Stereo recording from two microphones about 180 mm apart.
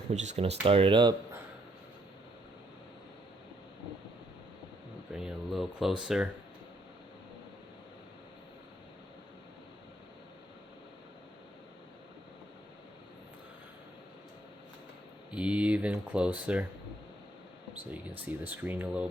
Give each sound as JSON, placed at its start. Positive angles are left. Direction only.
{"t": 0.1, "sound": "speech", "side_deg": -40}
{"t": 5.1, "sound": "a sound", "side_deg": 0}
{"t": 15.3, "sound": "speech", "side_deg": -5}
{"t": 17.9, "sound": "speech", "side_deg": -10}